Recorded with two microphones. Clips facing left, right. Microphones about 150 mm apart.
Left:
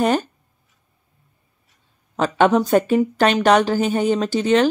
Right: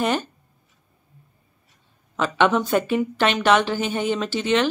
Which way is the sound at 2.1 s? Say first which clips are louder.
Left 4 dB; 40° left (ahead or behind).